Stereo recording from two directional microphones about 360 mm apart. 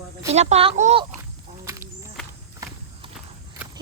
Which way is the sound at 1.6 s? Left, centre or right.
Centre.